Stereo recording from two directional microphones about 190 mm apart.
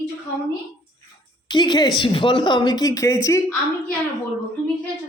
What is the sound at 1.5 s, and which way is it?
A woman's voice, 25° left (ahead or behind).